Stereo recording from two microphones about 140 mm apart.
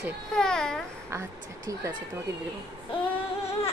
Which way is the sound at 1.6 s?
25° right (ahead or behind).